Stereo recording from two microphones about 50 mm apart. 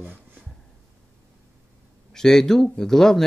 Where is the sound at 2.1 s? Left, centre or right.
Centre.